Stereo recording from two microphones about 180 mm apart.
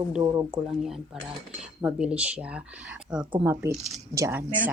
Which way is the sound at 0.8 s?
Centre (ahead or behind).